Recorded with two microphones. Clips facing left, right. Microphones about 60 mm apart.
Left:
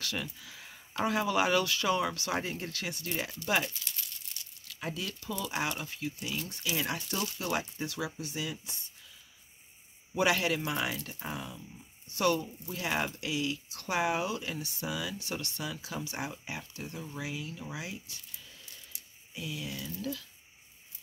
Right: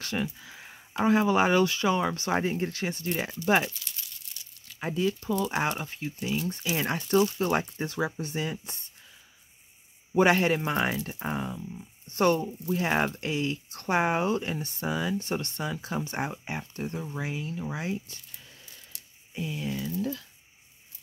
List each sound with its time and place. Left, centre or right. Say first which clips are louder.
0.0 s speech: right 6 dB; right
10.1 s speech: right 6 dB; right